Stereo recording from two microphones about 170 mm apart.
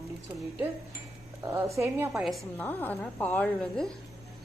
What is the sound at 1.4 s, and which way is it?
Speech, 15° right (ahead or behind).